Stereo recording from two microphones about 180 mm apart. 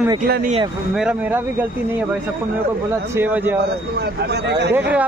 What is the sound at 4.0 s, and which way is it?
Speech, 65° right (ahead or behind).